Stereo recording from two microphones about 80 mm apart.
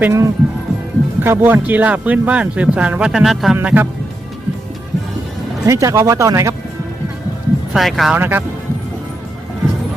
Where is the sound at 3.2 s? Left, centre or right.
Centre.